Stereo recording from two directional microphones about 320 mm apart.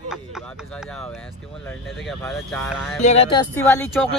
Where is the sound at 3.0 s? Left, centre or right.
Centre.